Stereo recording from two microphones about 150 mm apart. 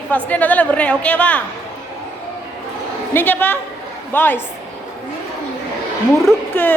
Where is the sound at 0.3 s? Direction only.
10° left (ahead or behind).